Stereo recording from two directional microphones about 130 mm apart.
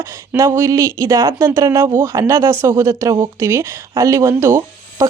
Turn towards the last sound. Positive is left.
turn(degrees=-20)  # may be behind; listen again after turning